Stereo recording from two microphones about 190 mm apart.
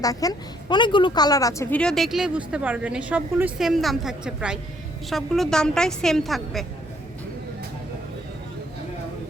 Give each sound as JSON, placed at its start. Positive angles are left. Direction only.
{"t": 0.0, "sound": "a woman's voice", "side_deg": 20}
{"t": 1.8, "sound": "a woman's voice", "side_deg": 0}